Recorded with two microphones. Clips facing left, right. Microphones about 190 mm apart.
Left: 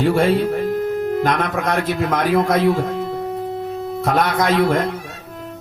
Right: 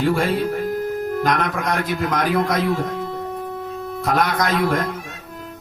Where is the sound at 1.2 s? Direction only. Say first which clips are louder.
Left 2 dB; 25° left (ahead or behind).